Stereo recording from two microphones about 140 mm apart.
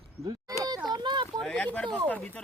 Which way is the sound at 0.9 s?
30° right (ahead or behind).